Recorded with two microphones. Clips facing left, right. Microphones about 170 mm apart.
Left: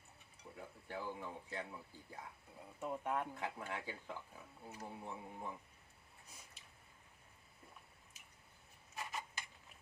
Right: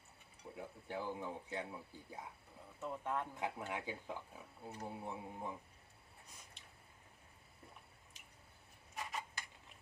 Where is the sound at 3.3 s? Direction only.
15° right (ahead or behind).